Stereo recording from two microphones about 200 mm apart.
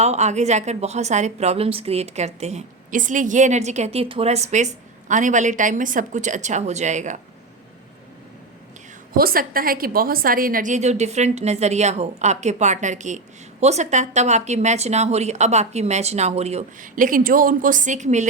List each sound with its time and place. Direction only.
0.0 s a woman's voice: 35° right (ahead or behind)
9.1 s a woman's voice: 45° right (ahead or behind)